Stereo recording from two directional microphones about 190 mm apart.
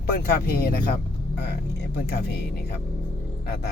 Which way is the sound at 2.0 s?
55° left (ahead or behind).